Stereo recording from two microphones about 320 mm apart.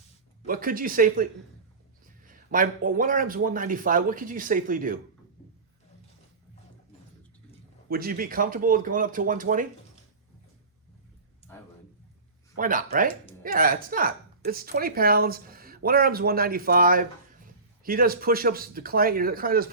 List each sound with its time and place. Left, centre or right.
0.4 s a woman's voice: right
7.9 s a woman's voice: right
12.5 s a woman's voice: right